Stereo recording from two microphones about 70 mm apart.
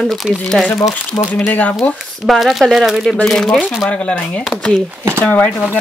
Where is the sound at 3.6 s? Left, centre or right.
Centre.